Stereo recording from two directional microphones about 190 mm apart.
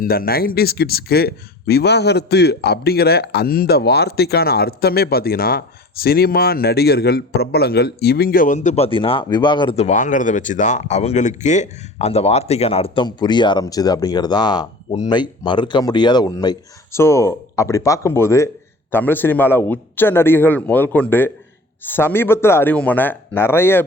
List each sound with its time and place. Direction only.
0.0 s speech: 50° left (ahead or behind); by 23.8 s 10° left (ahead or behind)